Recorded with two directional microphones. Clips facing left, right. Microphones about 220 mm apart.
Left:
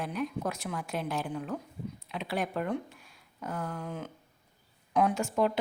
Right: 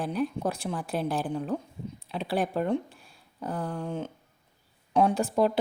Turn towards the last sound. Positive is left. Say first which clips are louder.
# right 3 dB
turn(degrees=-35)  # may be behind; listen again after turning